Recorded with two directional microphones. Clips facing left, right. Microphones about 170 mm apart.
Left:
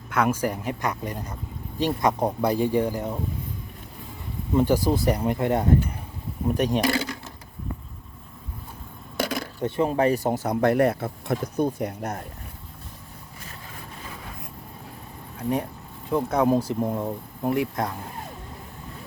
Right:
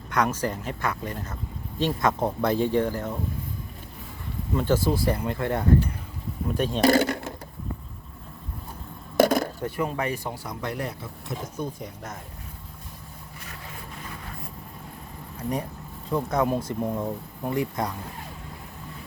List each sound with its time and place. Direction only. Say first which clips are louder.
0.1 s speech: left 2 dB; 10° left (ahead or behind)
4.5 s speech: left 3 dB; 15° left (ahead or behind)
7.0 s a sound: right 7 dB; 60° right (ahead or behind)
9.1 s a sound: right 8 dB; 45° right (ahead or behind)
9.6 s speech: left 4 dB; 25° left (ahead or behind)
9.9 s speech: left 8 dB; 35° left (ahead or behind)
10.5 s speech: left 13 dB; 60° left (ahead or behind)
15.4 s speech: left 3 dB; centre (ahead or behind)